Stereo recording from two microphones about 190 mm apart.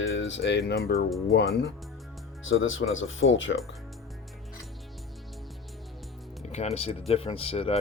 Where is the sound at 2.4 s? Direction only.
90° left.